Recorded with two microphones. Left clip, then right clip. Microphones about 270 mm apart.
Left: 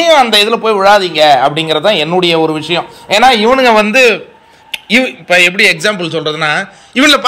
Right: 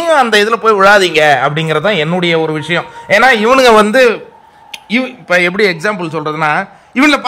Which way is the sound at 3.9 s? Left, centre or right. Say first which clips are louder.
Left 1 dB; centre.